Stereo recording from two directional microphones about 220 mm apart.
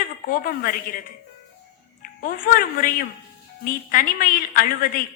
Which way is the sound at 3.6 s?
40° left (ahead or behind).